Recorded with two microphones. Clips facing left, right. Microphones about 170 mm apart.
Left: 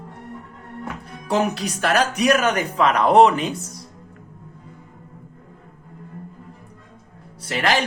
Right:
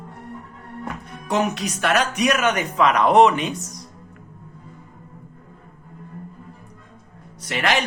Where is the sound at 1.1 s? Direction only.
35° left (ahead or behind).